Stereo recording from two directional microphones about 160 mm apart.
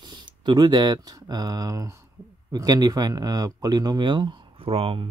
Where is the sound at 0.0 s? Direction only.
30° right (ahead or behind).